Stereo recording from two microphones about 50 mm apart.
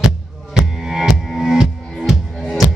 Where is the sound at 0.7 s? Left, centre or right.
Centre.